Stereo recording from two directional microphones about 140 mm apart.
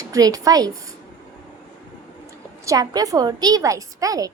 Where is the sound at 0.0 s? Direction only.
25° right (ahead or behind).